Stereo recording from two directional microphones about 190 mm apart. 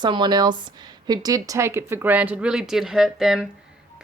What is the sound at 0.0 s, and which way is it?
Speech, 25° right (ahead or behind).